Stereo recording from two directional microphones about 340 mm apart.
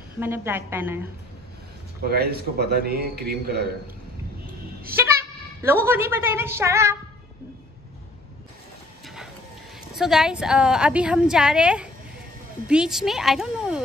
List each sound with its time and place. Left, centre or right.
0.2 s a woman's voice: centre
2.0 s a man's voice: right
5.6 s a woman's voice: centre
9.0 s a sound: centre
9.9 s a woman's voice: centre